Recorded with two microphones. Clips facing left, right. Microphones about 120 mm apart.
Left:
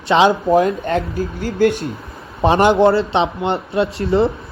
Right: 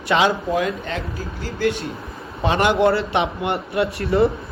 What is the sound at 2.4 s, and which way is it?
A man's voice, 30° left (ahead or behind).